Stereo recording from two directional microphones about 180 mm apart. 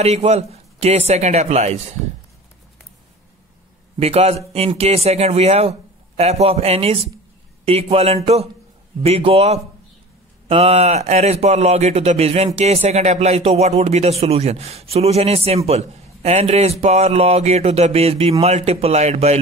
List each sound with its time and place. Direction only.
0.0 s a man's voice: 35° right (ahead or behind)
4.0 s a man's voice: 35° right (ahead or behind)